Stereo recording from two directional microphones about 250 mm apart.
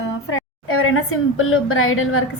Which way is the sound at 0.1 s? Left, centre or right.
Left.